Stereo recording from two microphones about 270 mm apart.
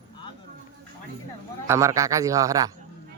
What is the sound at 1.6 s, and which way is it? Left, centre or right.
A man's voice, centre.